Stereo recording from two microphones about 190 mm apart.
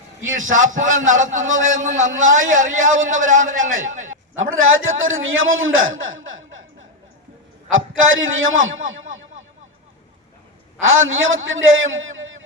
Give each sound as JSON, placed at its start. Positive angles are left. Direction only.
{"t": 0.5, "sound": "a man's voice", "side_deg": -40}
{"t": 3.8, "sound": "a man's voice", "side_deg": -90}
{"t": 7.7, "sound": "a man's voice", "side_deg": -90}
{"t": 10.8, "sound": "a man's voice", "side_deg": -90}